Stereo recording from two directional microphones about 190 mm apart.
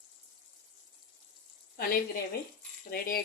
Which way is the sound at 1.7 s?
55° left (ahead or behind).